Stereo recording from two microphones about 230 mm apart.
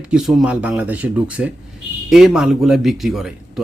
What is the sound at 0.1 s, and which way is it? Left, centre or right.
A man's voice, centre.